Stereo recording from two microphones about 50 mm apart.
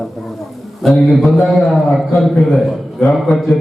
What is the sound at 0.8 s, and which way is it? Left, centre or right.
A man's voice, centre.